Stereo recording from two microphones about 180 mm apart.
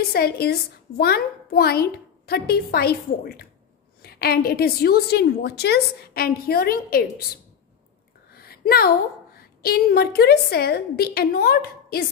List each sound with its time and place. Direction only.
0.1 s a woman's voice: 60° left (ahead or behind)
8.3 s a woman's voice: 60° left (ahead or behind)